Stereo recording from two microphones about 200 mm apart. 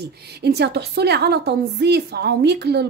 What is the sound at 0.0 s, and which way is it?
A woman's voice, 55° right (ahead or behind).